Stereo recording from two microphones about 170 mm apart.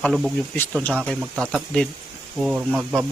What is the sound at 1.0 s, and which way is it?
Speech, 10° right (ahead or behind).